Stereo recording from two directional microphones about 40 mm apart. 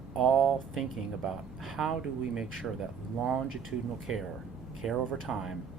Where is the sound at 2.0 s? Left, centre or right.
Centre.